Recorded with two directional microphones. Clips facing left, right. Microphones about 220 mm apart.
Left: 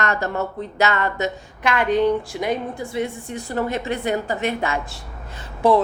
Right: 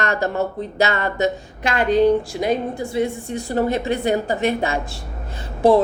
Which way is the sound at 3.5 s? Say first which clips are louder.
Right 4 dB; 35° right (ahead or behind).